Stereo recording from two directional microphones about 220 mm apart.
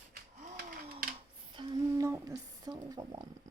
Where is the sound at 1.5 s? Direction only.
20° right (ahead or behind).